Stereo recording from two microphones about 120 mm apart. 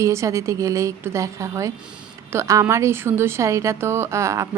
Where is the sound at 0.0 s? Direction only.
25° right (ahead or behind).